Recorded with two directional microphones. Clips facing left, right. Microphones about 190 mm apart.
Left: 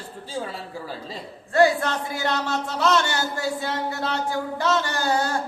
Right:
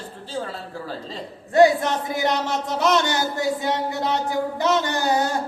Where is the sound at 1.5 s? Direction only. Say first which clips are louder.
Right 3 dB; 20° right (ahead or behind).